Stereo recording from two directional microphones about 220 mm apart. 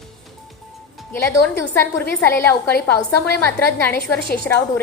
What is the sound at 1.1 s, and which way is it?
A woman's voice, 10° left (ahead or behind).